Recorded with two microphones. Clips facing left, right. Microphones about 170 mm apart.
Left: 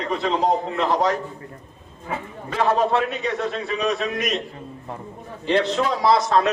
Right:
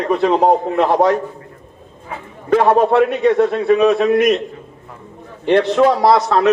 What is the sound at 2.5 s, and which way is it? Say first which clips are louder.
A man's voice: right 8 dB; 55° right (ahead or behind).